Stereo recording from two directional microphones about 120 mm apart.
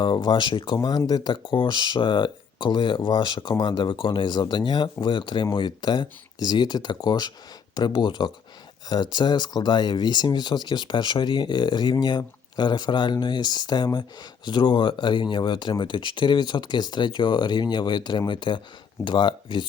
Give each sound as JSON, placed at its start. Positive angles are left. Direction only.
{"t": 0.0, "sound": "speech", "side_deg": 40}